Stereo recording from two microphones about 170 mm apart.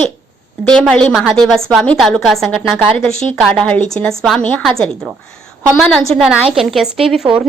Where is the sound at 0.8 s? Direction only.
5° left (ahead or behind).